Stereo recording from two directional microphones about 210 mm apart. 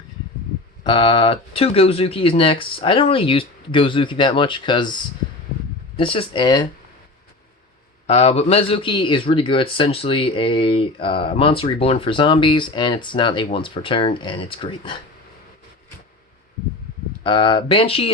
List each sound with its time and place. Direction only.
0.9 s a man's voice: 25° left (ahead or behind)
6.0 s a man's voice: 25° left (ahead or behind)
8.0 s a man's voice: 30° left (ahead or behind)
17.2 s a man's voice: 25° left (ahead or behind)